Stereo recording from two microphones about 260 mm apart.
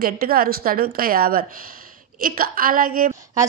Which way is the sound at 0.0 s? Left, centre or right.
Right.